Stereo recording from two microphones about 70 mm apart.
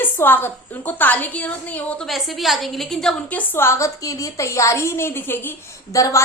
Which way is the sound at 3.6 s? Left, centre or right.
Left.